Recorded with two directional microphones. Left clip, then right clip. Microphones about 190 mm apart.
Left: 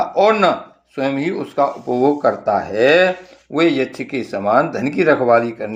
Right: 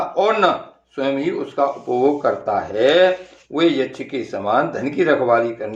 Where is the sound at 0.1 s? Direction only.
40° left (ahead or behind).